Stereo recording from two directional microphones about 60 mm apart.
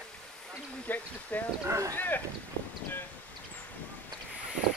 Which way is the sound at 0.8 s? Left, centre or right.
Left.